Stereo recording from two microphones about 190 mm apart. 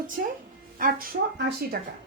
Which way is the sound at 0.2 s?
50° right (ahead or behind).